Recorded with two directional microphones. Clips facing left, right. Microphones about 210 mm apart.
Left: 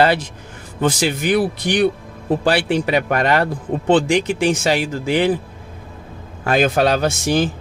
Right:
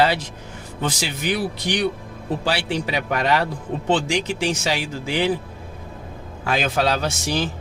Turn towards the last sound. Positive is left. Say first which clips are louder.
# left 6 dB
turn(degrees=50)  # may be behind; listen again after turning